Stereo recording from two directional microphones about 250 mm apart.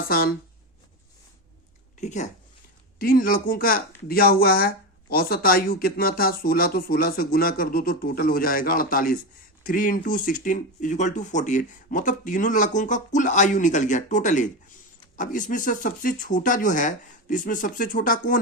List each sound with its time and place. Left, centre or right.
0.1 s speech: left
2.0 s speech: left